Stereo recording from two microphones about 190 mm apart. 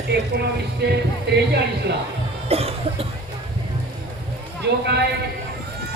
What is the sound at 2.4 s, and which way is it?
Cough, 30° right (ahead or behind).